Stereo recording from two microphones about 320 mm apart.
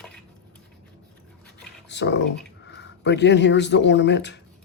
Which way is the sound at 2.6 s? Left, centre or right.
Left.